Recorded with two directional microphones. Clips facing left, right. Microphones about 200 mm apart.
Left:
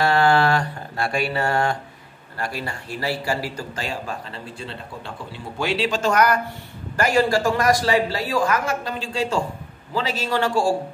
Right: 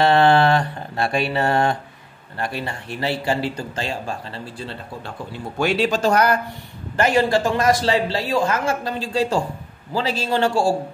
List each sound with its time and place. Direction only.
0.0 s mantra: 25° right (ahead or behind)
2.3 s a man's voice: 25° right (ahead or behind)
5.6 s a man's voice: 50° right (ahead or behind); by 10.7 s 30° right (ahead or behind)